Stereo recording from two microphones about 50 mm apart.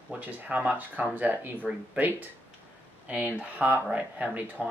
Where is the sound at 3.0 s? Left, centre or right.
Right.